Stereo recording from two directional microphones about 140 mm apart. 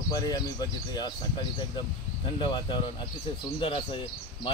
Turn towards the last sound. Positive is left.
turn(degrees=35)  # may be behind; listen again after turning